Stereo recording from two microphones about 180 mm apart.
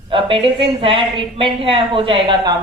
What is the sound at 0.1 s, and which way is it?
A man's voice, 30° right (ahead or behind).